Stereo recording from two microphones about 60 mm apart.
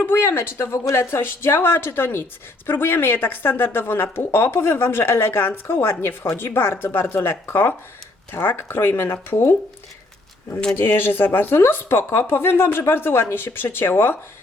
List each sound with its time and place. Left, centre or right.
0.0 s speech: left
10.8 s speech: left